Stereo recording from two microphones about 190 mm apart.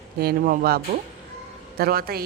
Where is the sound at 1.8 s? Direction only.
55° right (ahead or behind).